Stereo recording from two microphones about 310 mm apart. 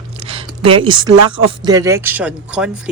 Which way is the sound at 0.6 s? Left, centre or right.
Centre.